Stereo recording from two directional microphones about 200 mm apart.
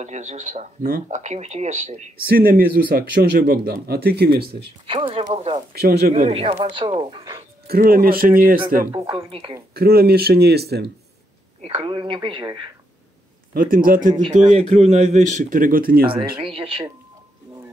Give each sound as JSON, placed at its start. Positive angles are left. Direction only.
{"t": 0.0, "sound": "speech", "side_deg": -35}
{"t": 4.8, "sound": "speech", "side_deg": -25}
{"t": 5.7, "sound": "speech", "side_deg": -50}
{"t": 6.5, "sound": "speech", "side_deg": -20}
{"t": 7.6, "sound": "speech", "side_deg": -50}
{"t": 8.9, "sound": "speech", "side_deg": -25}
{"t": 9.8, "sound": "speech", "side_deg": -50}
{"t": 11.6, "sound": "speech", "side_deg": -30}
{"t": 13.5, "sound": "a man's voice", "side_deg": -45}
{"t": 16.4, "sound": "speech", "side_deg": -25}